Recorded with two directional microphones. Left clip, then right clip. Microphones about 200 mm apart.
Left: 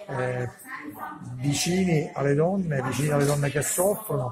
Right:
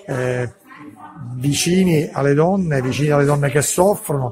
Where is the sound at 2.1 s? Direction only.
50° right (ahead or behind).